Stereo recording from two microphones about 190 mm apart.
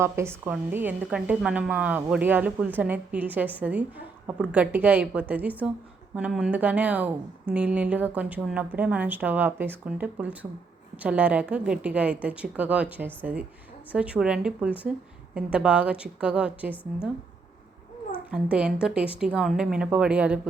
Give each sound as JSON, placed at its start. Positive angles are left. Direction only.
{"t": 0.0, "sound": "a woman's voice", "side_deg": -15}
{"t": 18.3, "sound": "a woman's voice", "side_deg": -5}